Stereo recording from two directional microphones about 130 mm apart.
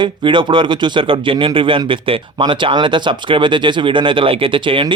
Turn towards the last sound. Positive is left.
turn(degrees=-40)  # may be behind; listen again after turning